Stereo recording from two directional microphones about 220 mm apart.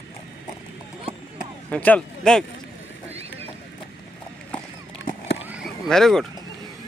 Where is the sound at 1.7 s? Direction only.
5° left (ahead or behind).